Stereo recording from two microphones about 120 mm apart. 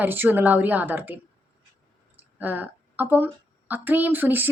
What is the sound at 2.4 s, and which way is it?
A woman's voice, 15° right (ahead or behind).